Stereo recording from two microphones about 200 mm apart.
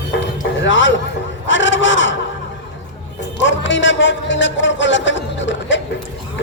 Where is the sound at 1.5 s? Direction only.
65° left (ahead or behind).